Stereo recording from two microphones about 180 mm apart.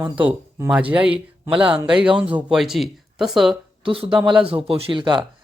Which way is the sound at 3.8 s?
30° right (ahead or behind).